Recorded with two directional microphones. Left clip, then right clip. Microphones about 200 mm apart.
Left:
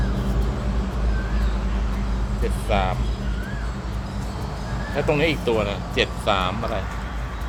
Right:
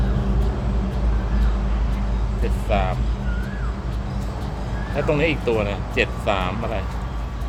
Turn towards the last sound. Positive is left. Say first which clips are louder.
# left 1 dB
turn(degrees=5)  # may be behind; listen again after turning